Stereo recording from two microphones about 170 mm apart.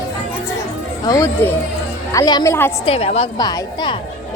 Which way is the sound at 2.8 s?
35° left (ahead or behind).